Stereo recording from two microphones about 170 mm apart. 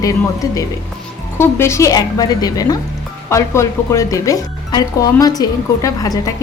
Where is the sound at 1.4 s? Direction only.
15° left (ahead or behind).